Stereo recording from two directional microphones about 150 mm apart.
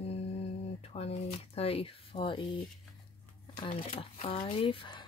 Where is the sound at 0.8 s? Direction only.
40° left (ahead or behind).